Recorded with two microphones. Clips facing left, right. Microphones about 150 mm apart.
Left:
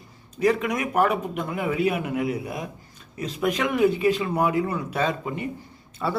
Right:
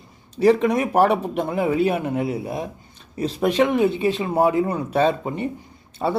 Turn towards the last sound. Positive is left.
turn(degrees=-35)  # may be behind; listen again after turning